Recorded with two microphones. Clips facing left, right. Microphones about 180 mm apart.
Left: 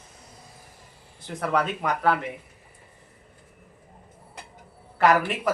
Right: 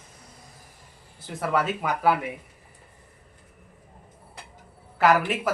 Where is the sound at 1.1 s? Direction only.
5° right (ahead or behind).